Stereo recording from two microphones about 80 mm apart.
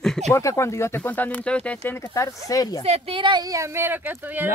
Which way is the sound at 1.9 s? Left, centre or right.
Left.